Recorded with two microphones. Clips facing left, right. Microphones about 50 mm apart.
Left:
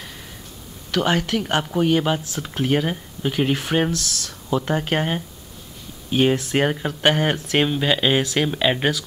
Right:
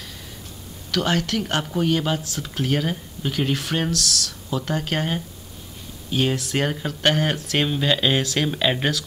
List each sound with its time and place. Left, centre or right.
0.9 s speech: centre